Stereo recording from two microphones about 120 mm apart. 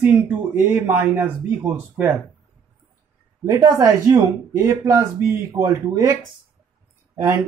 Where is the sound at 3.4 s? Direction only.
30° right (ahead or behind).